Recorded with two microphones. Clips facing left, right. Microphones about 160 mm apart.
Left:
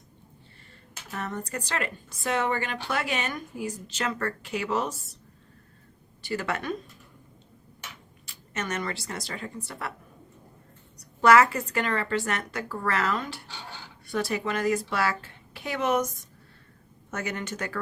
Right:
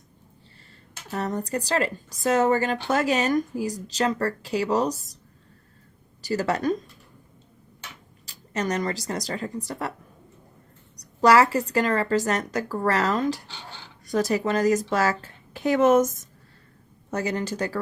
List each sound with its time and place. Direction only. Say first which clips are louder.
1.1 s speech: right 6 dB; 35° right (ahead or behind)
6.2 s speech: right 6 dB; 40° right (ahead or behind)
8.3 s speech: right 6 dB; 35° right (ahead or behind)
10.9 s speech: right 1 dB; 35° right (ahead or behind)
17.1 s speech: right 6 dB; 35° right (ahead or behind)